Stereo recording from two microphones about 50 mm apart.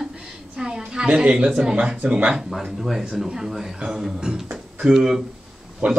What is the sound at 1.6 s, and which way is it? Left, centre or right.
Speech, right.